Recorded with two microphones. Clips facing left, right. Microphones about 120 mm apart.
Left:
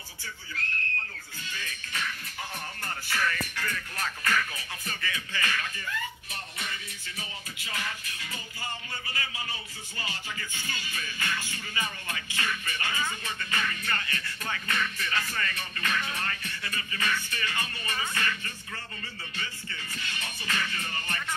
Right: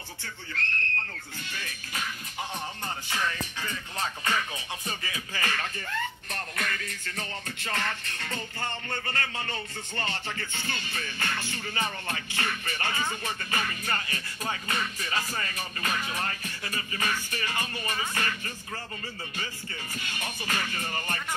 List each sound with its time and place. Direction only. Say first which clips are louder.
2.8 s music: left 2 dB; 20° right (ahead or behind)
5.4 s music: right 2 dB; 40° right (ahead or behind)
6.3 s music: right 5 dB; 60° right (ahead or behind)
7.6 s music: right 4 dB; 45° right (ahead or behind)
8.9 s speech: right 5 dB; 45° right (ahead or behind)
10.2 s music: right 3 dB; 45° right (ahead or behind)